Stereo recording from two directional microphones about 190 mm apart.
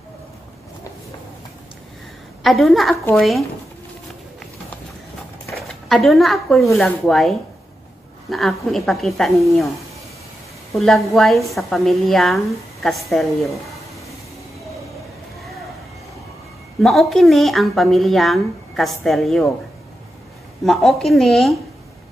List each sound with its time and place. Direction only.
2.4 s speech: centre (ahead or behind)
5.6 s speech: centre (ahead or behind)
10.7 s speech: centre (ahead or behind)
16.8 s speech: centre (ahead or behind)
20.6 s speech: centre (ahead or behind)